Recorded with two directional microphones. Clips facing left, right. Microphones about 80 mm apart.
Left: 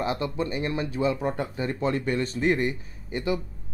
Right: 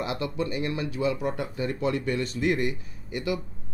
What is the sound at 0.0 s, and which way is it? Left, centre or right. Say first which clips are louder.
A man's voice: left 2 dB; left.